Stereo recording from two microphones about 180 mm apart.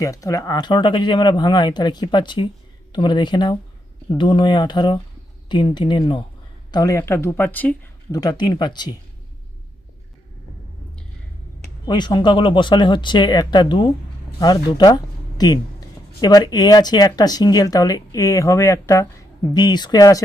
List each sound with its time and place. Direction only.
0.0 s speech: 20° left (ahead or behind)
8.1 s speech: 20° left (ahead or behind)
11.9 s speech: 25° left (ahead or behind)